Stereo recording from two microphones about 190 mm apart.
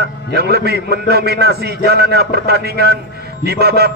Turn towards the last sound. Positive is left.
turn(degrees=-55)  # may be behind; listen again after turning